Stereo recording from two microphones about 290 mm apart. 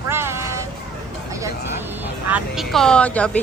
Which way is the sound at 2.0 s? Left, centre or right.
Centre.